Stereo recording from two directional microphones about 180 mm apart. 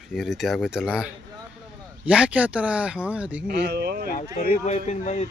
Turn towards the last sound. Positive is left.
turn(degrees=40)  # may be behind; listen again after turning